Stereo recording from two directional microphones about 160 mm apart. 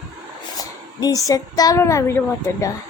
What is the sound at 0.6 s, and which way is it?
Speech, 25° left (ahead or behind).